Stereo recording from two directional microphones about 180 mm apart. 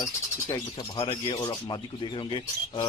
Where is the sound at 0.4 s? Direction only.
25° left (ahead or behind).